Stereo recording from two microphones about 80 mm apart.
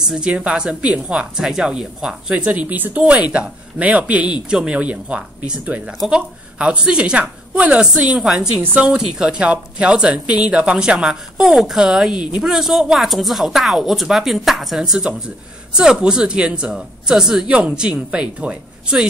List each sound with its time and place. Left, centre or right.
0.1 s a woman's voice: centre